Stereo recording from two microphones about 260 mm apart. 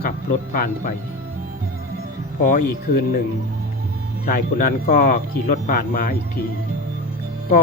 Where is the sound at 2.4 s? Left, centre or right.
Left.